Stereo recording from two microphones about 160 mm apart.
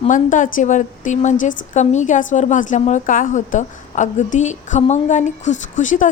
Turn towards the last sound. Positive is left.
turn(degrees=50)  # may be behind; listen again after turning